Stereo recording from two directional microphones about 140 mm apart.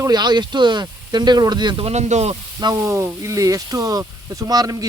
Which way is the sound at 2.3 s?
30° right (ahead or behind).